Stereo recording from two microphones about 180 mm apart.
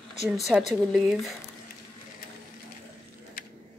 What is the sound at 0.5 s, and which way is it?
Speech, 5° left (ahead or behind).